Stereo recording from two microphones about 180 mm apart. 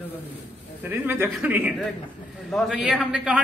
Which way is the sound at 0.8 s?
10° right (ahead or behind).